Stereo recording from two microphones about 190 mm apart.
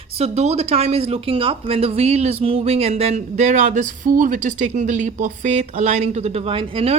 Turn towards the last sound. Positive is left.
turn(degrees=-30)  # may be behind; listen again after turning